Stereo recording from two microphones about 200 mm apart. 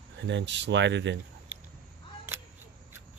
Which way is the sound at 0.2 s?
65° right (ahead or behind).